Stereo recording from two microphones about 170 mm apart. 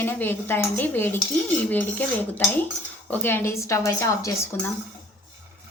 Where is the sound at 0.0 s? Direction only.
10° left (ahead or behind).